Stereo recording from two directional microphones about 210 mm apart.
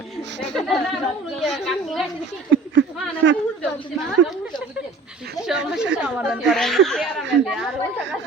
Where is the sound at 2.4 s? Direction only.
60° right (ahead or behind).